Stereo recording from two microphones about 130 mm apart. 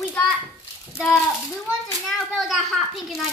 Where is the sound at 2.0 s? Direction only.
Centre (ahead or behind).